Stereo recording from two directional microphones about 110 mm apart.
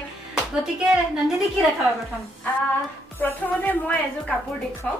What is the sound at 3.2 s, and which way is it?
Speech, 15° left (ahead or behind).